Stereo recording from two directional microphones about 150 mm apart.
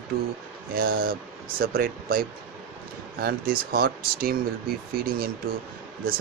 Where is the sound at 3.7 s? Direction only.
85° right.